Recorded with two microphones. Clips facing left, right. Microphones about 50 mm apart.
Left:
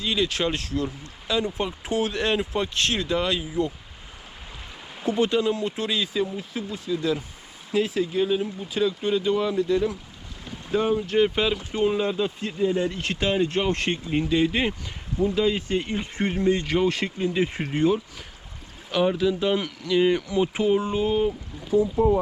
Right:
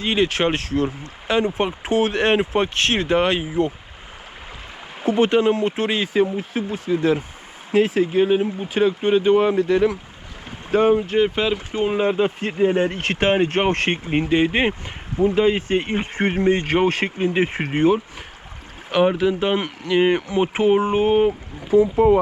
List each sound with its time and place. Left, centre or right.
0.0 s speech: right
5.0 s speech: right
9.6 s speech: right
10.7 s speech: right
11.0 s speech: centre; by 22.2 s right